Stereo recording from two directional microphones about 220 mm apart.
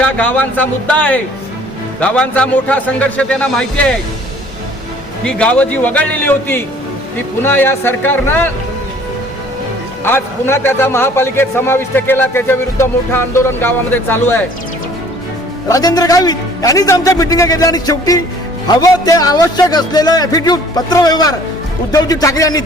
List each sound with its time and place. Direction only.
0.0 s a man's voice: 5° left (ahead or behind)
5.2 s a man's voice: 5° left (ahead or behind)
10.0 s a man's voice: 10° left (ahead or behind)
15.7 s a man's voice: 15° left (ahead or behind)